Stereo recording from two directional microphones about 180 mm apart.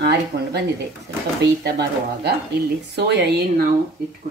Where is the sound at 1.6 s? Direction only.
65° right (ahead or behind).